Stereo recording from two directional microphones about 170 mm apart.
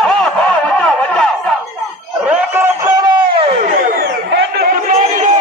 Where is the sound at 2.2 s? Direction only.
10° right (ahead or behind).